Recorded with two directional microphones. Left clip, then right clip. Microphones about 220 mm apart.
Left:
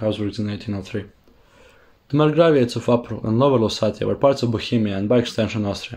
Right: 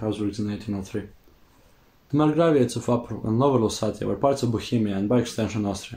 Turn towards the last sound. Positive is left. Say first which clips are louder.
# left 4 dB
turn(degrees=40)  # may be behind; listen again after turning